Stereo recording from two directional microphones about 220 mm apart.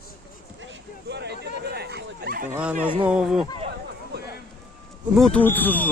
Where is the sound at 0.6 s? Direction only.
55° right (ahead or behind).